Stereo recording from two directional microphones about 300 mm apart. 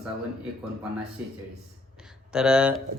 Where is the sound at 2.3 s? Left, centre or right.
Centre.